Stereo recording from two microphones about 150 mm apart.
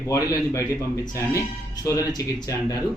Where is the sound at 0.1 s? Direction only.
20° left (ahead or behind).